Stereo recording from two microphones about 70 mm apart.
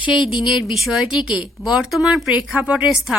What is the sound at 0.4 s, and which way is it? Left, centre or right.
A woman's voice, centre.